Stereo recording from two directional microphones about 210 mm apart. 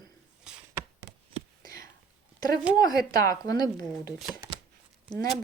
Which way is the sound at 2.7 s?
20° left (ahead or behind).